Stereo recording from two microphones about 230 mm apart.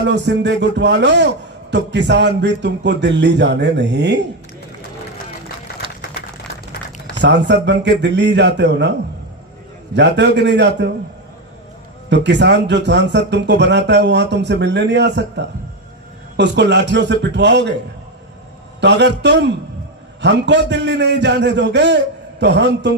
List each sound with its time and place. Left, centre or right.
0.1 s a man's voice: right
7.2 s a man's voice: right
12.0 s a man's voice: right
18.8 s a man's voice: right